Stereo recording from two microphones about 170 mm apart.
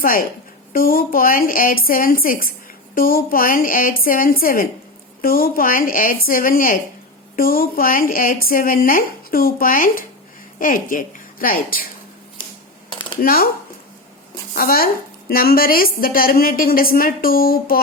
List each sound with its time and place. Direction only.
0.0 s a woman's voice: 55° left (ahead or behind)
13.2 s a woman's voice: 60° left (ahead or behind)
14.5 s a woman's voice: 60° left (ahead or behind)